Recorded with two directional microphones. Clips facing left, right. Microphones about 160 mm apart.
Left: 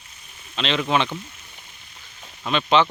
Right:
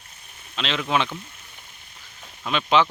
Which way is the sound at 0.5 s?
Centre (ahead or behind).